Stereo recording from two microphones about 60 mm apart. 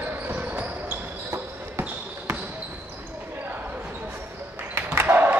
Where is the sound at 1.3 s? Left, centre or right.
Right.